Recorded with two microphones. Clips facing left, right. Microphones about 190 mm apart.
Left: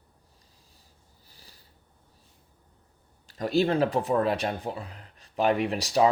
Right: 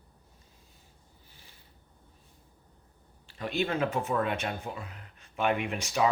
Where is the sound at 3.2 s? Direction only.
40° left (ahead or behind).